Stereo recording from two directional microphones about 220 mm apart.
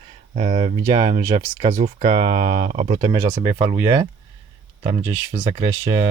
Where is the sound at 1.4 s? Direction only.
30° right (ahead or behind).